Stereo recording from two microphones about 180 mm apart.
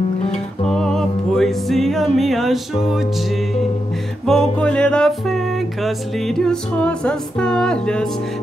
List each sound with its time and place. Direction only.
0.7 s music: 5° left (ahead or behind)
4.3 s music: 5° left (ahead or behind)